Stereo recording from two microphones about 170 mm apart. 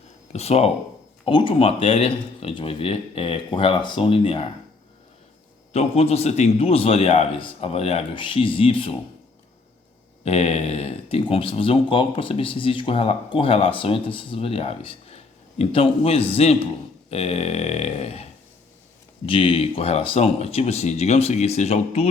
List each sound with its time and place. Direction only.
0.3 s speech: 40° left (ahead or behind)
5.7 s speech: 40° left (ahead or behind)
10.2 s speech: 35° left (ahead or behind)